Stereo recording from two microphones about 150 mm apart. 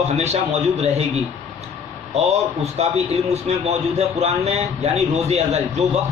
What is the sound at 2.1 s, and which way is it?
A man's voice, 45° right (ahead or behind).